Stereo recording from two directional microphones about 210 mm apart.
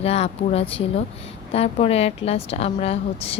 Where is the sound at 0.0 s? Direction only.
30° left (ahead or behind).